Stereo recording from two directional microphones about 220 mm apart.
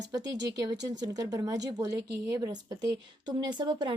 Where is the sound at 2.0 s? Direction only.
50° right (ahead or behind).